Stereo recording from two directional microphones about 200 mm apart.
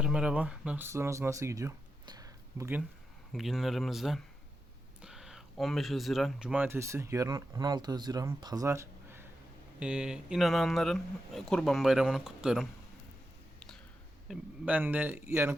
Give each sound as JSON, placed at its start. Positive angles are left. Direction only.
{"t": 0.0, "sound": "speech", "side_deg": -5}
{"t": 3.3, "sound": "speech", "side_deg": 0}
{"t": 14.3, "sound": "a man's voice", "side_deg": -5}